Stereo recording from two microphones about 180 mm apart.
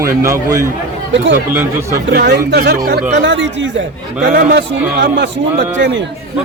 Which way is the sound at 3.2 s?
90° right.